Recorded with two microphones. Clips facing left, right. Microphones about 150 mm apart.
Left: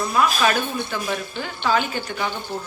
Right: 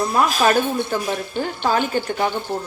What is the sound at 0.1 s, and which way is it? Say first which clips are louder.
Speech: right 1 dB; 40° right (ahead or behind).